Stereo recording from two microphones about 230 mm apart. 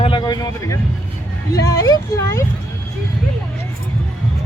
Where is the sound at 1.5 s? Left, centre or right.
Centre.